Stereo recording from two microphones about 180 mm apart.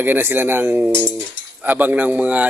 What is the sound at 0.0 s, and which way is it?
Speech, 10° right (ahead or behind).